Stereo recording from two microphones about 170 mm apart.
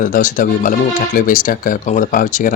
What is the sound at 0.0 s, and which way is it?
Speech, 50° left (ahead or behind).